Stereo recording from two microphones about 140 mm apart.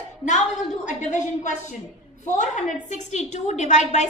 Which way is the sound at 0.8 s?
65° left (ahead or behind).